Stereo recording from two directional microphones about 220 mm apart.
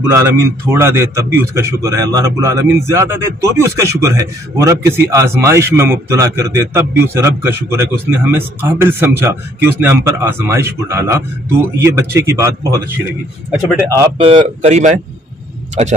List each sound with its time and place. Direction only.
0.0 s a man's voice: 10° right (ahead or behind)
14.2 s speech: 25° right (ahead or behind)